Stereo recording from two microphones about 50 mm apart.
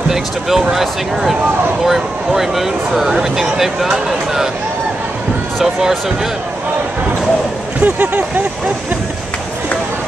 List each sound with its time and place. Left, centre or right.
0.1 s speech: centre
5.6 s speech: centre
7.8 s speech: right